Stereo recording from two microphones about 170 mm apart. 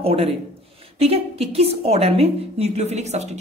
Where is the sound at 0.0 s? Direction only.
35° right (ahead or behind).